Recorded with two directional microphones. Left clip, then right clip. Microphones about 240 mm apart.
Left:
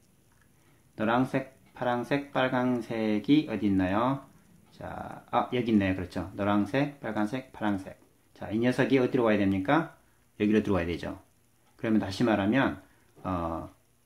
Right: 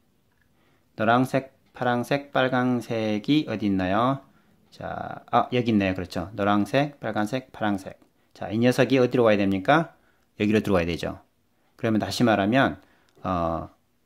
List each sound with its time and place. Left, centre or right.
0.9 s speech: right